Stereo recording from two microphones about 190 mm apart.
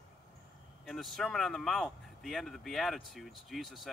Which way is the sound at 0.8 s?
Centre (ahead or behind).